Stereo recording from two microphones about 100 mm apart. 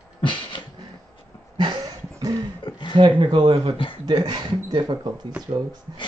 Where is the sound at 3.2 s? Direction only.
55° right (ahead or behind).